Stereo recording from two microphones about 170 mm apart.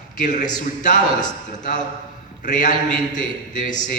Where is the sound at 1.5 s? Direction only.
45° left (ahead or behind).